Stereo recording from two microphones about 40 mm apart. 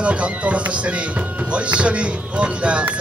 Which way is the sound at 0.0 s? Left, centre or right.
Right.